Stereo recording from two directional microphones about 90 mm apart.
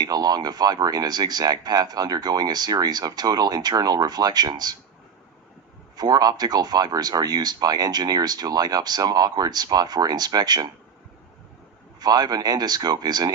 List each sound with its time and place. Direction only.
0.0 s speech: 45° right (ahead or behind)
6.0 s speech: 45° right (ahead or behind)
11.9 s speech: 50° right (ahead or behind)